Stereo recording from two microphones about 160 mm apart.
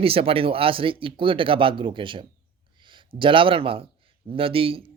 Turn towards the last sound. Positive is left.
turn(degrees=-35)  # may be behind; listen again after turning